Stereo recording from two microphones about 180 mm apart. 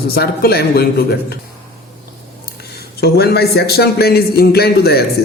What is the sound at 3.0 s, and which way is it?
Speech, 60° left (ahead or behind).